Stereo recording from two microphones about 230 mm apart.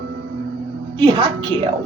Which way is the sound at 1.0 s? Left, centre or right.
Right.